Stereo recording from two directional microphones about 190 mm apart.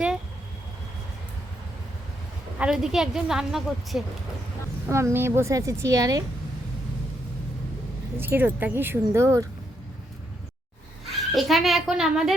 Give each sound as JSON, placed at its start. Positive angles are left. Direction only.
{"t": 2.6, "sound": "a woman's voice", "side_deg": -5}
{"t": 4.9, "sound": "a woman's voice", "side_deg": -15}
{"t": 8.2, "sound": "a woman's voice", "side_deg": -10}
{"t": 11.3, "sound": "a woman's voice", "side_deg": 0}